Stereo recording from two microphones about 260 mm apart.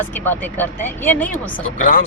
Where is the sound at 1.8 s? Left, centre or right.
Left.